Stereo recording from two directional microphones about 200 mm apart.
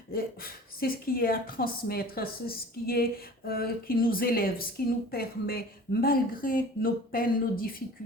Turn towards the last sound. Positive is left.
turn(degrees=45)  # may be behind; listen again after turning